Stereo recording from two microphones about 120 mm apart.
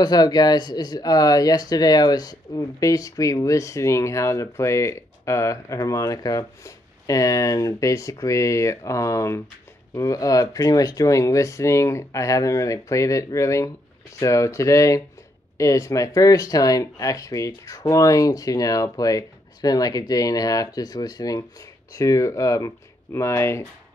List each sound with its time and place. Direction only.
0.0 s speech: 35° left (ahead or behind)